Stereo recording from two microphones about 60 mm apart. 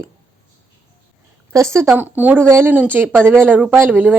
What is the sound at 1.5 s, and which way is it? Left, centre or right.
Speech, right.